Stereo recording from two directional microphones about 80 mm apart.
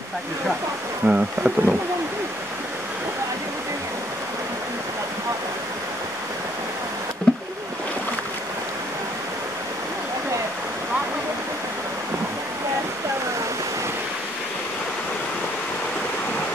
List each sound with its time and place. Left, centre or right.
1.0 s speech: centre
7.3 s rowboat: centre